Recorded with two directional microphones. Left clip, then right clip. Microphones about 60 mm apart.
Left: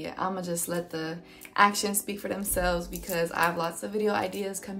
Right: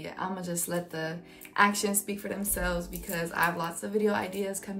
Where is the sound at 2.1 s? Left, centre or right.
Left.